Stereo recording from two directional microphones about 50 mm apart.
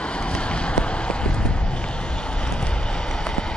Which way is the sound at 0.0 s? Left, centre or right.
Left.